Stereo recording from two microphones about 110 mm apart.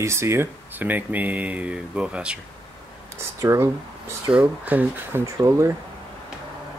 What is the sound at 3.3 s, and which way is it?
Speech, 25° right (ahead or behind).